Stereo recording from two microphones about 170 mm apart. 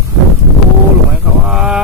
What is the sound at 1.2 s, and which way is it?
Speech, 5° right (ahead or behind).